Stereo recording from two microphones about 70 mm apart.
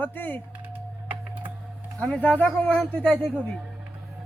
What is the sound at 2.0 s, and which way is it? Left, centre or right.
Speech, centre.